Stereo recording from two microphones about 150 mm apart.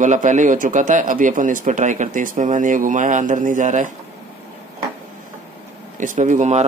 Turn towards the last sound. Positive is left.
turn(degrees=-50)  # may be behind; listen again after turning